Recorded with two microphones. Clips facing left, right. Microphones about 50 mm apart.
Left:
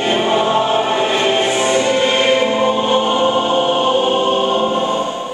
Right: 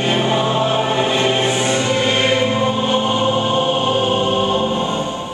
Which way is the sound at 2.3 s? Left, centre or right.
Centre.